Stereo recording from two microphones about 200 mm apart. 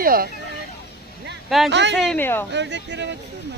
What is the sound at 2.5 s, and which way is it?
Speech, 60° right (ahead or behind).